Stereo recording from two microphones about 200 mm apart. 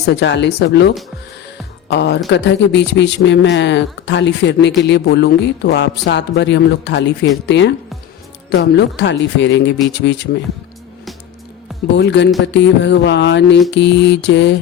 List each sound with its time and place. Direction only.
0.0 s speech: 60° left (ahead or behind)
11.9 s speech: 60° left (ahead or behind)